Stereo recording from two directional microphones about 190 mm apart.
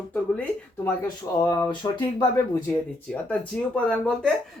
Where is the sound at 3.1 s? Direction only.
5° left (ahead or behind).